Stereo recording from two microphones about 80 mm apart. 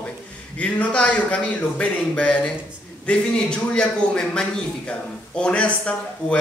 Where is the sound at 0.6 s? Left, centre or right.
Centre.